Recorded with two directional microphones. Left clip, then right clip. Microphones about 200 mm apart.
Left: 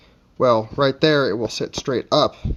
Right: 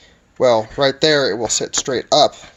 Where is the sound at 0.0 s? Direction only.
50° left (ahead or behind).